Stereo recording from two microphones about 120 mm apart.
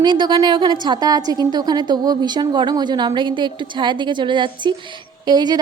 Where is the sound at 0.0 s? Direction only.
40° right (ahead or behind).